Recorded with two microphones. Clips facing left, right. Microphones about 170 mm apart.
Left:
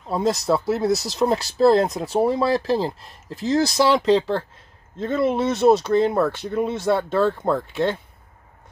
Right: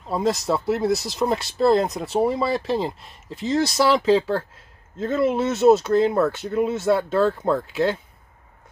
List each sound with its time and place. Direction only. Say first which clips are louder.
0.1 s speech: left 1 dB; centre (ahead or behind)